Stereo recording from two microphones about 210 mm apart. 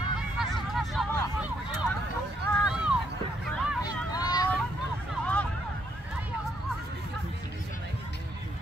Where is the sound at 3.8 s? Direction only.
20° left (ahead or behind).